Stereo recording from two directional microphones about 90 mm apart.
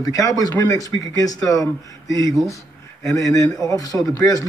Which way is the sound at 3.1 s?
40° left (ahead or behind).